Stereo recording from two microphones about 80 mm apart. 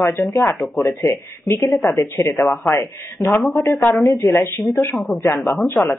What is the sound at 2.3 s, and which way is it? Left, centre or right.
Speech, centre.